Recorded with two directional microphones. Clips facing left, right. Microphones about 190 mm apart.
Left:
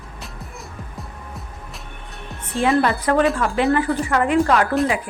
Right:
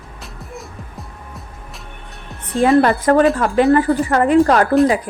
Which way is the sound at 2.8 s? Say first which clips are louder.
Right 5 dB; 45° right (ahead or behind).